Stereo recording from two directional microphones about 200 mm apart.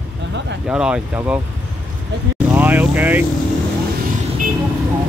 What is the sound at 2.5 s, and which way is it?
Vehicle, 10° right (ahead or behind).